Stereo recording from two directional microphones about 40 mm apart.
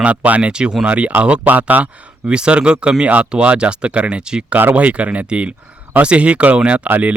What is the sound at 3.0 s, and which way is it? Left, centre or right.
Speech, right.